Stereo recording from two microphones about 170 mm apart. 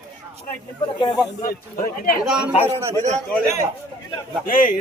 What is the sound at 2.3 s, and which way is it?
Speech, 5° right (ahead or behind).